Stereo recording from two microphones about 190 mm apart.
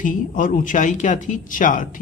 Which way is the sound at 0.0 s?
45° left (ahead or behind).